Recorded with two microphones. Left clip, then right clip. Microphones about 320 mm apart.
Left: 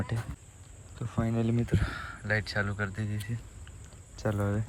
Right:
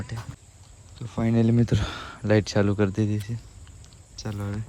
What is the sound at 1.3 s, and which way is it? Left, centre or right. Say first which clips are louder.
Speech: right 9 dB; right.